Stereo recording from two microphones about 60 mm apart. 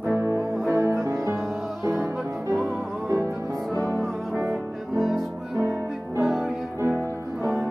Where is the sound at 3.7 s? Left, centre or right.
Left.